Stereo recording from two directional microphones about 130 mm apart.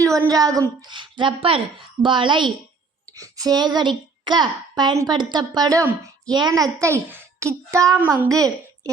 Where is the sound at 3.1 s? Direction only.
30° right (ahead or behind).